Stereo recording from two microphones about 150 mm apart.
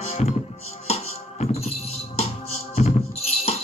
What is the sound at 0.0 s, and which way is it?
Music, 45° left (ahead or behind).